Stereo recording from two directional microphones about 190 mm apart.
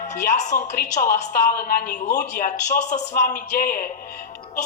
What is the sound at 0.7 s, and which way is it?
Speech, 40° left (ahead or behind).